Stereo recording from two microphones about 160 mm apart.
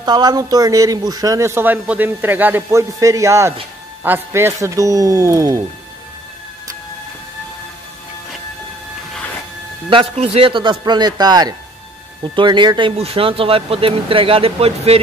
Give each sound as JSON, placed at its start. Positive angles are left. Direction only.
{"t": 0.0, "sound": "a man's voice", "side_deg": -25}
{"t": 10.1, "sound": "a man's voice", "side_deg": -35}